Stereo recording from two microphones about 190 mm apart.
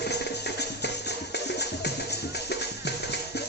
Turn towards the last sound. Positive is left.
turn(degrees=60)  # may be behind; listen again after turning